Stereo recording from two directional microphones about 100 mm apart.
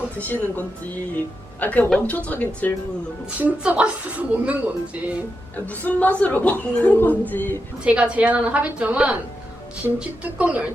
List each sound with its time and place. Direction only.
1.5 s a woman's voice: 15° left (ahead or behind)
3.3 s a woman's voice: 15° right (ahead or behind)
5.5 s a woman's voice: 15° left (ahead or behind)
7.9 s a woman's voice: 10° right (ahead or behind)